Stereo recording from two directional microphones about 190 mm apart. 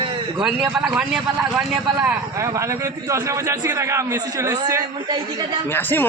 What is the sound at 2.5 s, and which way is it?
A man's voice, 15° right (ahead or behind).